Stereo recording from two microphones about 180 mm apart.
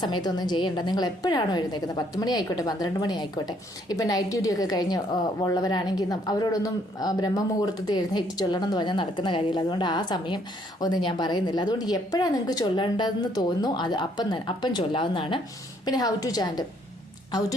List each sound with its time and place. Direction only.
0.0 s a woman's voice: 25° left (ahead or behind)